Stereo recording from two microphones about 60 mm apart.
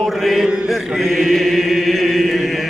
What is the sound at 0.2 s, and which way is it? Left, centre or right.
Mantra, centre.